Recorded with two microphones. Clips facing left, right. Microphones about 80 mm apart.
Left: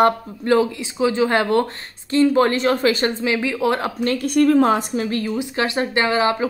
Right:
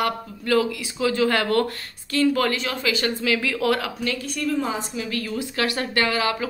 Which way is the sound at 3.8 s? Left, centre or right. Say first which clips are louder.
Left 6 dB; left.